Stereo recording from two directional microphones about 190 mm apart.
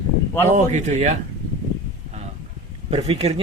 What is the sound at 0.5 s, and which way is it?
Speech, 40° right (ahead or behind).